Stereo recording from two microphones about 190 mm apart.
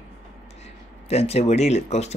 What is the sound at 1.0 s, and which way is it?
Speech, 35° left (ahead or behind).